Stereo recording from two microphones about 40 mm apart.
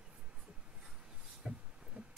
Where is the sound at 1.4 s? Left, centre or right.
Centre.